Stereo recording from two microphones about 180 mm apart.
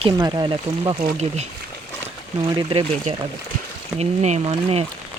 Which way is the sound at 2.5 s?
25° right (ahead or behind).